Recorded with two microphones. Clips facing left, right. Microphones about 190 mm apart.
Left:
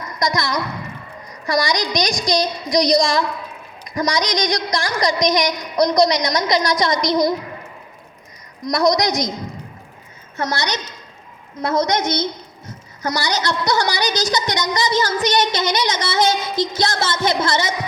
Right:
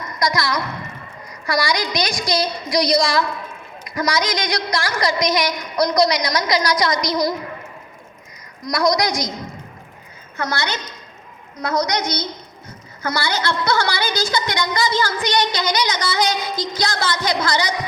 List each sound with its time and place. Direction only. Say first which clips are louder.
0.2 s a child's voice: even; 20° left (ahead or behind)
8.6 s a child's voice: left 2 dB; 20° left (ahead or behind)
10.3 s a child's voice: left 1 dB; 20° left (ahead or behind)